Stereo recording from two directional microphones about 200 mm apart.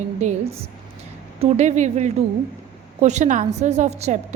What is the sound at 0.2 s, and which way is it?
A woman's voice, 35° right (ahead or behind).